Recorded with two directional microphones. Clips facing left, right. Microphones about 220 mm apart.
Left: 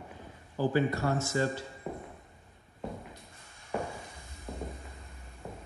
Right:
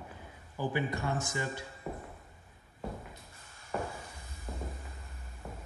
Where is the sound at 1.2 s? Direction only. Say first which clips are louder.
Left 6 dB; 15° right (ahead or behind).